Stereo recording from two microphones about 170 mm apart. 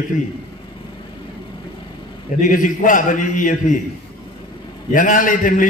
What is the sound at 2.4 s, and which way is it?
A man's voice, 50° left (ahead or behind).